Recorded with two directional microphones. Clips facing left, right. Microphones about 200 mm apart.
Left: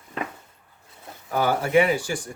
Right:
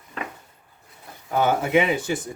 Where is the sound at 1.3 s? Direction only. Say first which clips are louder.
Even; 20° right (ahead or behind).